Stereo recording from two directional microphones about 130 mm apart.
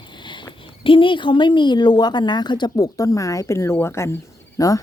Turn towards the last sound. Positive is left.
turn(degrees=25)  # may be behind; listen again after turning